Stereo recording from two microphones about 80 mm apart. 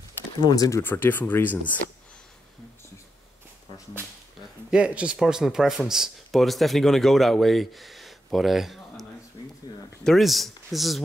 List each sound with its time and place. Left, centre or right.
0.4 s speech: left
0.8 s speech: left
4.6 s speech: centre
9.4 s a sound: left
10.0 s speech: centre